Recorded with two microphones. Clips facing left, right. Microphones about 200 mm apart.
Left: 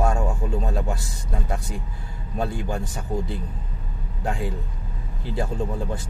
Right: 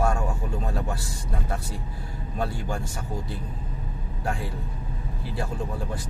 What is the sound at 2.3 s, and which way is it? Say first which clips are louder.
Speech: left 3 dB; 20° left (ahead or behind).